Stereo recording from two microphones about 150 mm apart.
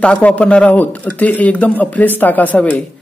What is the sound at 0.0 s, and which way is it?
Speech, 5° left (ahead or behind).